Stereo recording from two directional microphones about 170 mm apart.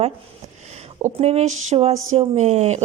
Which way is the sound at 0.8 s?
40° right (ahead or behind).